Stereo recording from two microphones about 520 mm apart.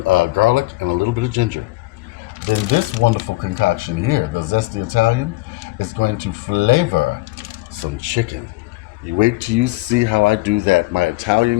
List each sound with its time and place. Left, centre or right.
0.0 s speech: right